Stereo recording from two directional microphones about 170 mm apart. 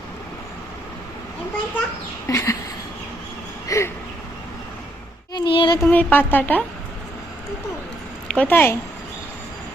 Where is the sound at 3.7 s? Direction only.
20° left (ahead or behind).